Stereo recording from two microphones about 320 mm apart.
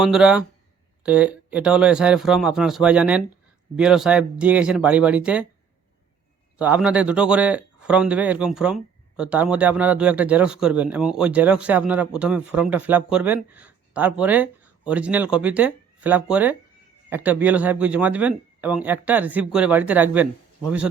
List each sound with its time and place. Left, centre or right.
0.0 s a man's voice: centre
6.6 s a man's voice: centre